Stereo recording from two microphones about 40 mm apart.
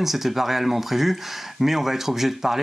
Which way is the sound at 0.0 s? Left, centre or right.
Centre.